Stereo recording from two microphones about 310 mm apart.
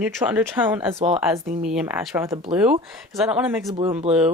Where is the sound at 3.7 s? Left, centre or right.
Centre.